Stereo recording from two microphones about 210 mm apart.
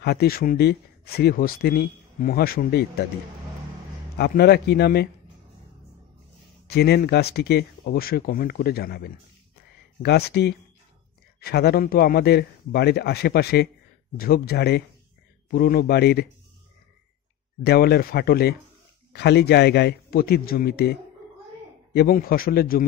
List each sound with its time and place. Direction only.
0.0 s speech: 50° left (ahead or behind)
4.2 s speech: 50° left (ahead or behind)
6.7 s speech: 50° left (ahead or behind)
17.6 s speech: 50° left (ahead or behind)